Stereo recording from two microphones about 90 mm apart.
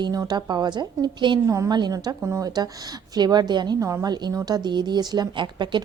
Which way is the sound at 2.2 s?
35° right (ahead or behind).